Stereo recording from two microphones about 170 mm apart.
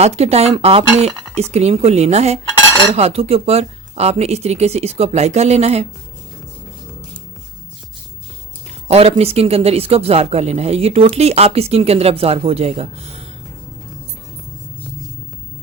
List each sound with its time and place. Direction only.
0.0 s speech: 40° right (ahead or behind)
8.9 s speech: 35° right (ahead or behind)